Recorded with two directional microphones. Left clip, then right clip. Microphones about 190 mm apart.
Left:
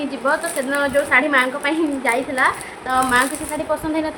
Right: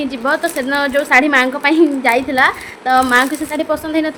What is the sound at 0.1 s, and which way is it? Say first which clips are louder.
A woman's voice: right 2 dB; 45° right (ahead or behind).